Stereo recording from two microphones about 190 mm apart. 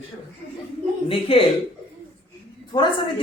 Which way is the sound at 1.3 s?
30° left (ahead or behind).